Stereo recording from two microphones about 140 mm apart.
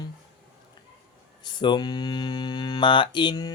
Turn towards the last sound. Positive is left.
turn(degrees=30)  # may be behind; listen again after turning